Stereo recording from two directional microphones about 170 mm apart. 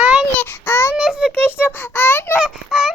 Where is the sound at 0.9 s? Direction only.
5° right (ahead or behind).